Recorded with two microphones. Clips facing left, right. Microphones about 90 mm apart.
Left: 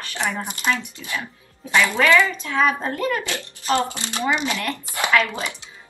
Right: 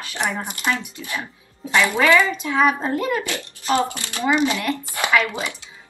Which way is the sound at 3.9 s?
20° left (ahead or behind).